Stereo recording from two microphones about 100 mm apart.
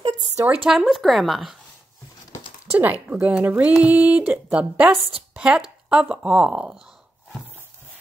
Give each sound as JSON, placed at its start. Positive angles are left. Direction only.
{"t": 0.7, "sound": "a woman's voice", "side_deg": 0}
{"t": 2.7, "sound": "speech", "side_deg": -15}
{"t": 5.3, "sound": "a sound", "side_deg": -10}
{"t": 5.9, "sound": "speech", "side_deg": -10}